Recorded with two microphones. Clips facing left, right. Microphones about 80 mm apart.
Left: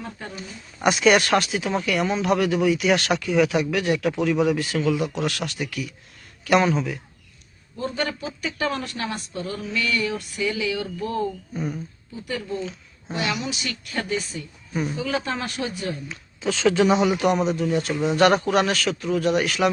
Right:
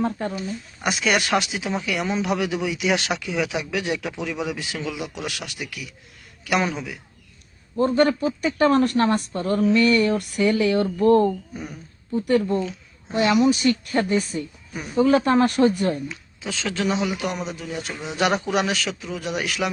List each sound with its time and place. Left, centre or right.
0.0 s speech: right
0.3 s a man's voice: centre
7.8 s speech: right
11.5 s a man's voice: centre
12.1 s speech: right
13.1 s speech: right
16.4 s a man's voice: centre